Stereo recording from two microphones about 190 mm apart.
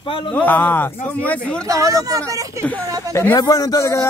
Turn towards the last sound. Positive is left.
turn(degrees=15)  # may be behind; listen again after turning